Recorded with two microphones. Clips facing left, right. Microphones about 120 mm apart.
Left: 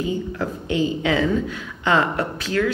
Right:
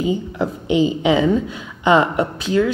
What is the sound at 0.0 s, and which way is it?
Speech, 20° right (ahead or behind).